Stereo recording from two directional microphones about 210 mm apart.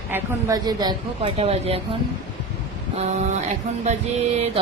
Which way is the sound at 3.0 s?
35° right (ahead or behind).